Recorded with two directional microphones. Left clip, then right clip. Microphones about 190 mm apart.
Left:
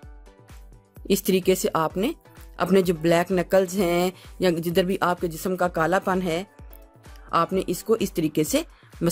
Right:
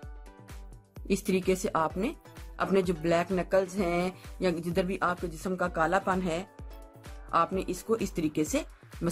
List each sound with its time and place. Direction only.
1.0 s speech: 40° left (ahead or behind)